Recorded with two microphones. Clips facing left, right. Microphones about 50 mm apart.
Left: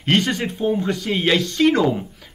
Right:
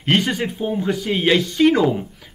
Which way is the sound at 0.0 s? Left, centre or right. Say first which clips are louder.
Even; centre.